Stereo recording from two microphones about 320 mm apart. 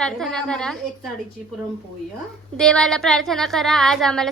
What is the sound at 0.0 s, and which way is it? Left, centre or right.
Speech, centre.